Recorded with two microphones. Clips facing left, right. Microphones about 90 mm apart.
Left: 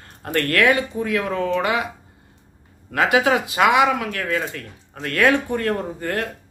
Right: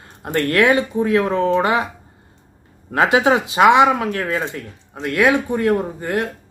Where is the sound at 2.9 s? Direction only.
25° right (ahead or behind).